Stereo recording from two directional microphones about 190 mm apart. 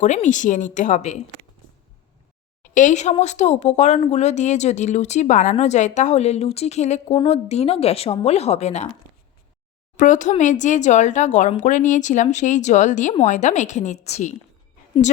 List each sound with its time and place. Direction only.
0.0 s a woman's voice: 40° left (ahead or behind)
2.7 s a woman's voice: 40° left (ahead or behind)
10.0 s a woman's voice: 40° left (ahead or behind)